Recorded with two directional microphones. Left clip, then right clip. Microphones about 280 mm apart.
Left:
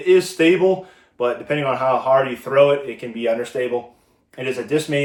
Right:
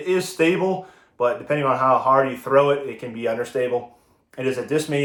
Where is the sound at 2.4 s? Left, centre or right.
Centre.